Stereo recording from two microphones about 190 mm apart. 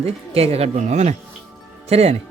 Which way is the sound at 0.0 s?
30° right (ahead or behind).